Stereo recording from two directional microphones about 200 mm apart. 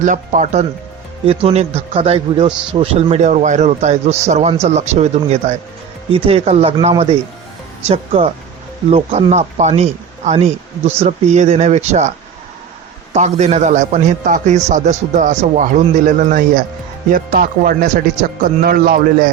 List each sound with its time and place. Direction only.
0.0 s a man's voice: 40° right (ahead or behind)
2.5 s a man's voice: 5° right (ahead or behind)
2.7 s a man's voice: 30° right (ahead or behind)
13.1 s a man's voice: 35° right (ahead or behind)